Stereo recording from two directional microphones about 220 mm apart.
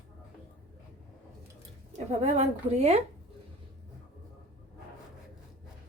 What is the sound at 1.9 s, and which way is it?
A woman's voice, 30° right (ahead or behind).